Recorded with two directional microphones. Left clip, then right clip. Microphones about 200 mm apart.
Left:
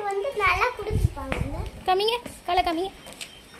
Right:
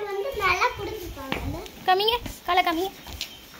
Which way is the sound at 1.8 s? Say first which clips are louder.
Right 1 dB; 5° left (ahead or behind).